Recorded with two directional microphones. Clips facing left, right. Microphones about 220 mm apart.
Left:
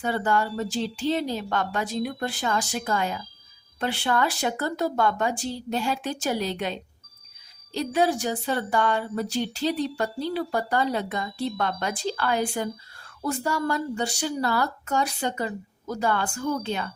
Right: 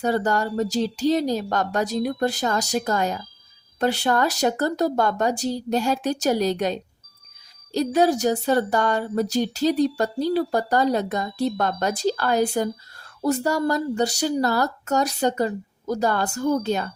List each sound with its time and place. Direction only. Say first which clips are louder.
0.0 s speech: right 3 dB; 40° right (ahead or behind)